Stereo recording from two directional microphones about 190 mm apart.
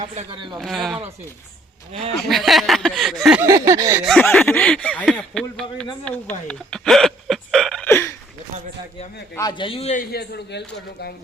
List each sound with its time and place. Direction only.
0.0 s speech: 35° right (ahead or behind)
0.3 s speech: 25° right (ahead or behind)
0.6 s speech: centre (ahead or behind)
1.9 s speech: 30° right (ahead or behind)
2.2 s speech: centre (ahead or behind)
3.4 s a sound: 15° right (ahead or behind)
4.0 s speech: centre (ahead or behind)
9.3 s a man's voice: 20° left (ahead or behind)
10.0 s a man's voice: 55° left (ahead or behind)